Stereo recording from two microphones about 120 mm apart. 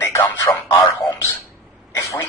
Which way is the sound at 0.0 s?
20° left (ahead or behind).